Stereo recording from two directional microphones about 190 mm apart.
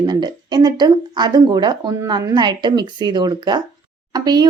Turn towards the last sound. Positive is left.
turn(degrees=-20)  # may be behind; listen again after turning